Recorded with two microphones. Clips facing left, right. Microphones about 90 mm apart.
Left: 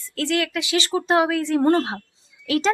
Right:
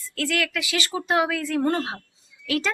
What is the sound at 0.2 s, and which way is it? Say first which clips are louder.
A woman's voice: left 3 dB; 25° left (ahead or behind).